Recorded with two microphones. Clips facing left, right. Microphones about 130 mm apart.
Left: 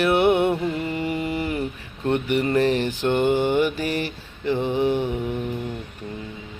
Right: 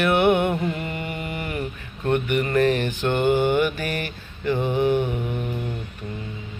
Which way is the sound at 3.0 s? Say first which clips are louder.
Left 2 dB; 15° left (ahead or behind).